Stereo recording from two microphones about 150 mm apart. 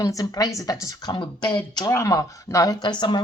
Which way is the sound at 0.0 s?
20° left (ahead or behind).